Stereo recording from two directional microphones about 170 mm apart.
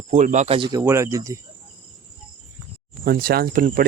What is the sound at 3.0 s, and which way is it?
Speech, 60° right (ahead or behind).